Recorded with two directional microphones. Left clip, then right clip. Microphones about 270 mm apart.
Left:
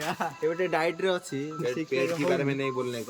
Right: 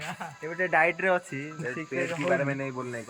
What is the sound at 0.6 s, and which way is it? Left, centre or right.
Speech, centre.